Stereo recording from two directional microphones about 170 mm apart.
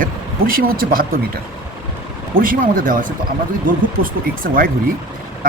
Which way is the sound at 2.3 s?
55° right (ahead or behind).